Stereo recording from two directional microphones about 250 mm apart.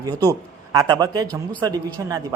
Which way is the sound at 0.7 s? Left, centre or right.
Centre.